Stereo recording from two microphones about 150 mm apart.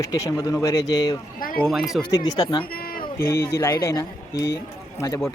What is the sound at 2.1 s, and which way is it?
Speech, 25° left (ahead or behind).